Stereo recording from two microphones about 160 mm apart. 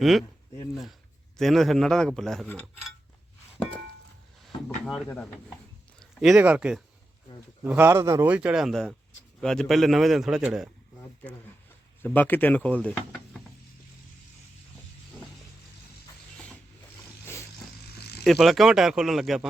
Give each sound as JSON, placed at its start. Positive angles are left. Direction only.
{"t": 0.0, "sound": "speech", "side_deg": 0}
{"t": 1.4, "sound": "speech", "side_deg": 0}
{"t": 5.0, "sound": "speech", "side_deg": 10}
{"t": 6.0, "sound": "a man's voice", "side_deg": -5}
{"t": 12.0, "sound": "speech", "side_deg": 10}
{"t": 17.9, "sound": "zipper", "side_deg": 90}
{"t": 18.3, "sound": "speech", "side_deg": 0}